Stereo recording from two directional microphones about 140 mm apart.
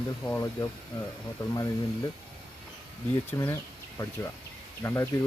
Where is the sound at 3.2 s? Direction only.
20° left (ahead or behind).